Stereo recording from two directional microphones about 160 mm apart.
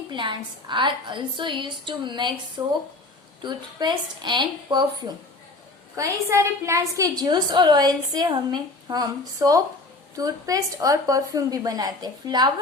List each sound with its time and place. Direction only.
0.1 s a woman's voice: 30° right (ahead or behind)